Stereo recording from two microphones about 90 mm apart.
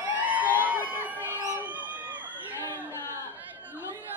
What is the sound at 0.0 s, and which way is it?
Crowd, 15° right (ahead or behind).